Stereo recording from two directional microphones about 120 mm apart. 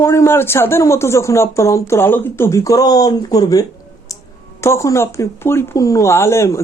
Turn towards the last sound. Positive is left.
turn(degrees=25)  # may be behind; listen again after turning